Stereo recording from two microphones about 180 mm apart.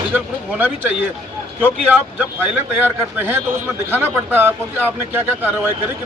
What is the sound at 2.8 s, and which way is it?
Speech, 10° right (ahead or behind).